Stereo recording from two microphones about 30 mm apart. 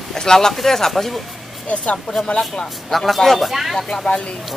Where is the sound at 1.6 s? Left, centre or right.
Left.